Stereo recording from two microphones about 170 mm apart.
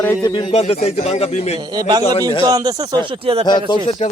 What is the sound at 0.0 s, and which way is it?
Speech, 15° left (ahead or behind).